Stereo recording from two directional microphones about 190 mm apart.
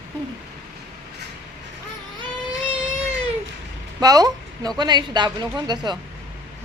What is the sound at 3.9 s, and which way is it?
A woman's voice, 20° right (ahead or behind).